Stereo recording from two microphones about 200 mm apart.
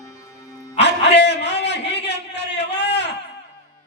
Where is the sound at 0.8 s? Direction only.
60° left (ahead or behind).